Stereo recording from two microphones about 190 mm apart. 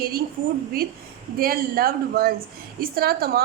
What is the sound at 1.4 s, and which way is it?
A woman's voice, 50° right (ahead or behind).